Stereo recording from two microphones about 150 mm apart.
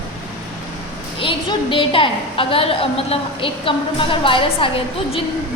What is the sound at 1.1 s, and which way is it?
A woman's voice, 35° left (ahead or behind).